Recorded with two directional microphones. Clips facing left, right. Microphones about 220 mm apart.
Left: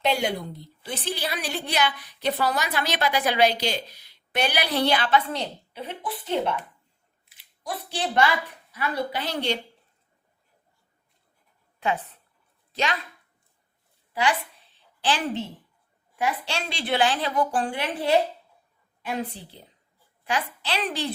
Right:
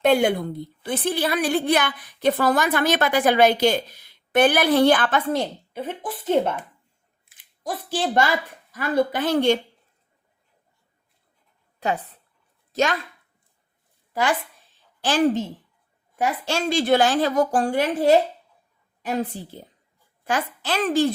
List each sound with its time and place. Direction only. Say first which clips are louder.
0.0 s a woman's voice: right 7 dB; 50° right (ahead or behind)
11.8 s a woman's voice: right 2 dB; 40° right (ahead or behind)
12.7 s speech: right 6 dB; 45° right (ahead or behind)
14.1 s a sound: right 2 dB; 45° right (ahead or behind)
16.1 s a woman's voice: right 4 dB; 45° right (ahead or behind)